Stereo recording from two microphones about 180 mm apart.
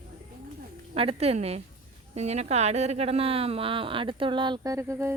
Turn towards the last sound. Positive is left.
turn(degrees=-15)  # may be behind; listen again after turning